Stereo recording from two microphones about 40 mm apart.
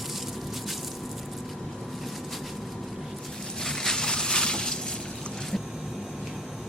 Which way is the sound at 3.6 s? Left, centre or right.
Centre.